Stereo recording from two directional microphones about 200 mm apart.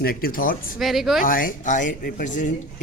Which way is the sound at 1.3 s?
45° left (ahead or behind).